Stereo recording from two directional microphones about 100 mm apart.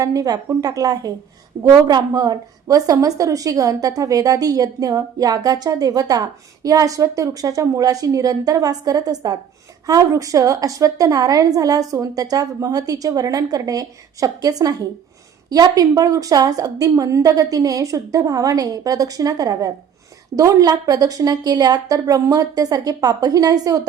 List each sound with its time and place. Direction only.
0.0 s a woman's voice: 35° right (ahead or behind)